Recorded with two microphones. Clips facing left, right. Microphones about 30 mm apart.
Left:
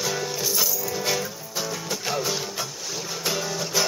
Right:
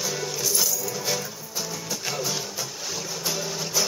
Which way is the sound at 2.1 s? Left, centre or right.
Centre.